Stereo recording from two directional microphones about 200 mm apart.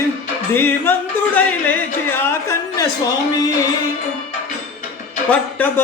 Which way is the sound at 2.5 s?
15° left (ahead or behind).